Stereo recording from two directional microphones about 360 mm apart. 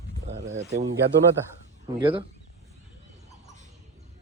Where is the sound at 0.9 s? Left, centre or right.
Right.